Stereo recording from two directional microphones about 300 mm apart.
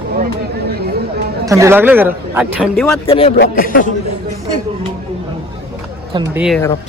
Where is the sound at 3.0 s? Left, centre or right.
Centre.